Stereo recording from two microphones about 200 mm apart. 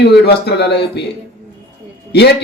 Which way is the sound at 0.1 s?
55° left (ahead or behind).